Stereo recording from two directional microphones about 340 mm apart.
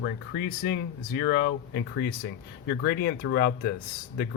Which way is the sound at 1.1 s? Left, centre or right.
Left.